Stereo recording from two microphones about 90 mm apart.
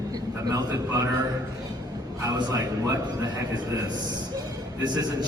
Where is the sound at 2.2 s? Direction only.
45° right (ahead or behind).